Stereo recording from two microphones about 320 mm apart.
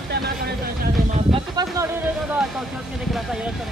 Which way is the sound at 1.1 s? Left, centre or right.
Centre.